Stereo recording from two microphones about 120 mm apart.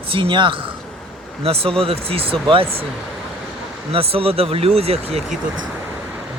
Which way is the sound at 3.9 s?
55° right (ahead or behind).